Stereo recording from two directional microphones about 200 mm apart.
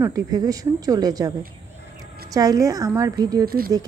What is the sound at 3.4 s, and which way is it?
Speech, 50° right (ahead or behind).